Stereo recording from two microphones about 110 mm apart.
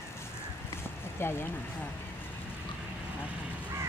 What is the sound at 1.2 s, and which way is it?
Speech, 20° left (ahead or behind).